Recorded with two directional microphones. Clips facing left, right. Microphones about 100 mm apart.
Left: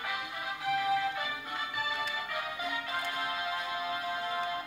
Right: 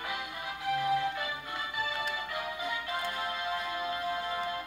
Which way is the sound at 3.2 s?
20° left (ahead or behind).